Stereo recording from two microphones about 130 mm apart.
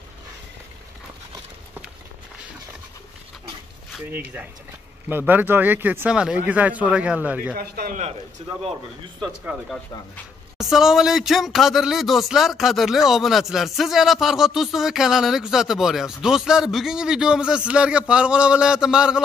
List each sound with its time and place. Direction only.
4.1 s speech: 15° right (ahead or behind)
7.5 s speech: 90° right
8.4 s speech: 50° right (ahead or behind)
10.6 s speech: 5° right (ahead or behind)